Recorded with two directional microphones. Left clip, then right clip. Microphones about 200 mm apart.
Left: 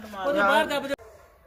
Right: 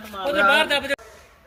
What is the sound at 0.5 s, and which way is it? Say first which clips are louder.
Speech: right 4 dB; 60° left (ahead or behind).